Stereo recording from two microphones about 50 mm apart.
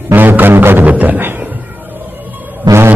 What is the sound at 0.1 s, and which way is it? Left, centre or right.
Music, right.